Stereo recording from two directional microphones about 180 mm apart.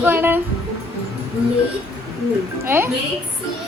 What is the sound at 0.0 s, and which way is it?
Speech, 10° right (ahead or behind).